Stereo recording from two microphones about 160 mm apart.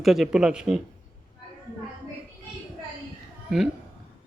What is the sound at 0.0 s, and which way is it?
Speech, centre (ahead or behind).